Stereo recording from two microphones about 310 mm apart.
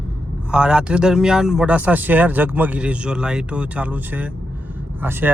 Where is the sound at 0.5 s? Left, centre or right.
Centre.